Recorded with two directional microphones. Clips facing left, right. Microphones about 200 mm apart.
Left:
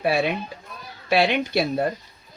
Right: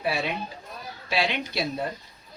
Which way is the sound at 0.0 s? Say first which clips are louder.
Left 6 dB; 55° left (ahead or behind).